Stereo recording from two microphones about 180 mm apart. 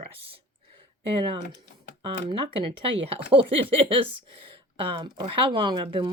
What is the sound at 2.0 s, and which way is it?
Speech, 25° right (ahead or behind).